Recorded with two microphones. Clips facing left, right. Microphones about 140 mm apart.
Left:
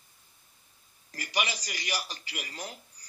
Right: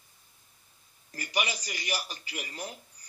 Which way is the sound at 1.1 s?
25° right (ahead or behind).